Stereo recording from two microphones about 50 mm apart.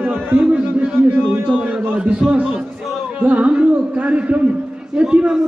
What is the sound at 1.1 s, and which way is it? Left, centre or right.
Speech, right.